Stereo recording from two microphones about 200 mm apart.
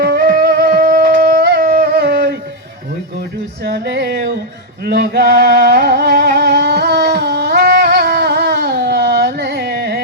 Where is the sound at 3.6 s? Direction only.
55° right (ahead or behind).